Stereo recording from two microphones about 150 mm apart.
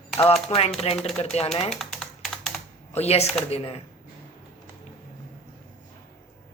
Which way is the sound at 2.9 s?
45° left (ahead or behind).